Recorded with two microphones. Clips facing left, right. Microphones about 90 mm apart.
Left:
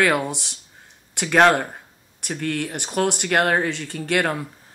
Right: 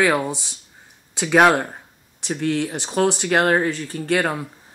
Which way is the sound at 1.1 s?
10° right (ahead or behind).